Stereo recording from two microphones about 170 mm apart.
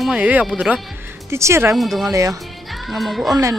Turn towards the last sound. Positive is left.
turn(degrees=0)  # may be behind; listen again after turning